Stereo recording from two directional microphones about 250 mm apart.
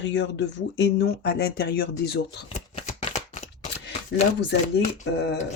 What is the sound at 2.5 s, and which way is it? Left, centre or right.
Shuffling cards, left.